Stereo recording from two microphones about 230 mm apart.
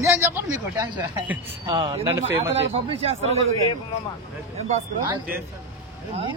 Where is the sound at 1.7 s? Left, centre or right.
Right.